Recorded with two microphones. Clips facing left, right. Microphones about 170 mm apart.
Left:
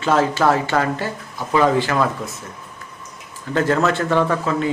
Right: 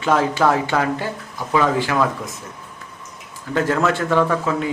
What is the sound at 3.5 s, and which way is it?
A man's voice, 5° right (ahead or behind).